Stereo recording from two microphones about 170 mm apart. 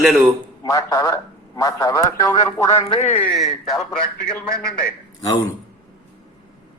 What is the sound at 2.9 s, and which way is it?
Speech, 35° left (ahead or behind).